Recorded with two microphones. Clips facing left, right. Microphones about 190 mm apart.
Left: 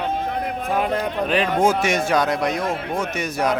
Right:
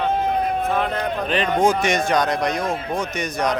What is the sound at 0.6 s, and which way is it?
A man's voice, 10° left (ahead or behind).